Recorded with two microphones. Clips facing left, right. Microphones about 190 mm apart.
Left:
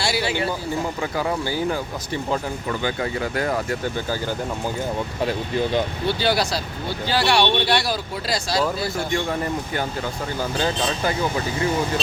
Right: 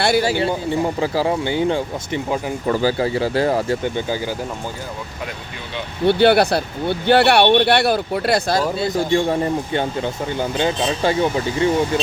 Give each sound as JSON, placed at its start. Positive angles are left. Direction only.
{"t": 0.0, "sound": "speech", "side_deg": -50}
{"t": 1.0, "sound": "speech", "side_deg": -30}
{"t": 2.6, "sound": "speech", "side_deg": -35}
{"t": 6.1, "sound": "speech", "side_deg": -60}
{"t": 8.8, "sound": "speech", "side_deg": -25}